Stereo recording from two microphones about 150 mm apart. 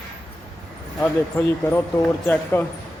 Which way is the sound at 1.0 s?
15° left (ahead or behind).